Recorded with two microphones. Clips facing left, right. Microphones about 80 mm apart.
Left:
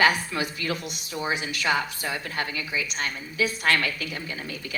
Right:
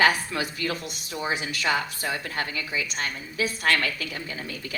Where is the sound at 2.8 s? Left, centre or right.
Right.